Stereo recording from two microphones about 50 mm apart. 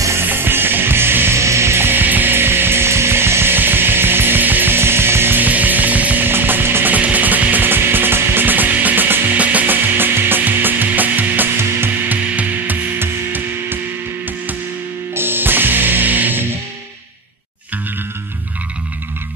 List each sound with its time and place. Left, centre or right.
0.2 s music: right
1.4 s music: right
5.4 s music: right
6.9 s music: right
9.9 s music: right
15.1 s music: right